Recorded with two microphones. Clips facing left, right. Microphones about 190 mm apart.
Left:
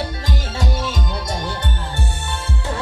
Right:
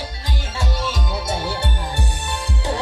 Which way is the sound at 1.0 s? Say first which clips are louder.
Right 1 dB; 5° right (ahead or behind).